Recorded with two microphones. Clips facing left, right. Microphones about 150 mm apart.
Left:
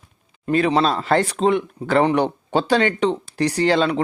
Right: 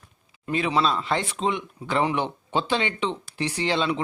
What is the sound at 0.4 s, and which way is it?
Speech, 45° left (ahead or behind).